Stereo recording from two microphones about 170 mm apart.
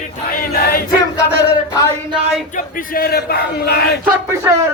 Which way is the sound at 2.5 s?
55° left (ahead or behind).